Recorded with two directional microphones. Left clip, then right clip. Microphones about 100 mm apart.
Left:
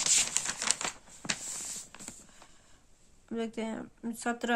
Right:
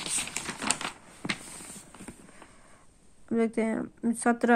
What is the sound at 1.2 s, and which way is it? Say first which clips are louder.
Walk: right 2 dB; 25° right (ahead or behind).